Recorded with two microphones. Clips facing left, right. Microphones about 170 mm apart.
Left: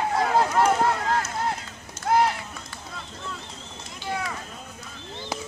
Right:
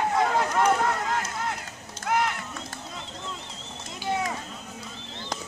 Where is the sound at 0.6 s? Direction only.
35° left (ahead or behind).